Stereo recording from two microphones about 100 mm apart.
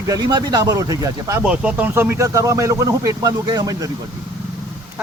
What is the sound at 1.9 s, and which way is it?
Speech, 25° right (ahead or behind).